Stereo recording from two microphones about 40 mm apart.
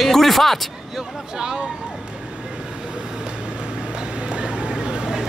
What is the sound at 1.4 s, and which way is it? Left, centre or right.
Speech, centre.